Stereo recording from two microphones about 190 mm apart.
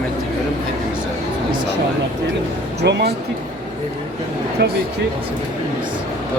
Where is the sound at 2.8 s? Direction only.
60° right (ahead or behind).